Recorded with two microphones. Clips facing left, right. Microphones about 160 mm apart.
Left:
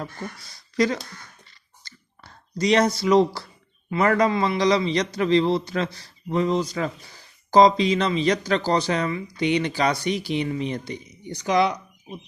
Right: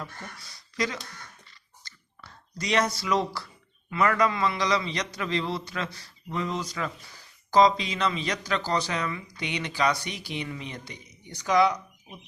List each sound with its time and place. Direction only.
0.8 s a man's voice: 35° left (ahead or behind)
1.8 s a sound: 30° left (ahead or behind)
3.8 s a man's voice: 30° left (ahead or behind)